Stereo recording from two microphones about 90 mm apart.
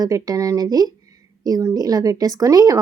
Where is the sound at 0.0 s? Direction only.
40° right (ahead or behind).